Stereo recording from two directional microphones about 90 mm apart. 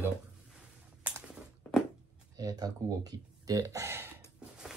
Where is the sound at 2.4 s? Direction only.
45° right (ahead or behind).